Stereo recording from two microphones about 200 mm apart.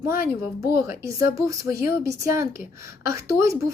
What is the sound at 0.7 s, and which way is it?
A woman's voice, 15° right (ahead or behind).